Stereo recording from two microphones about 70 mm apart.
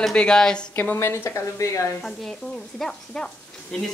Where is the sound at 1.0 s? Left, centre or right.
Left.